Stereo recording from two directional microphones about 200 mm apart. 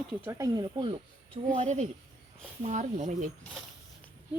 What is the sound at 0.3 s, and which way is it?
Speech, 15° right (ahead or behind).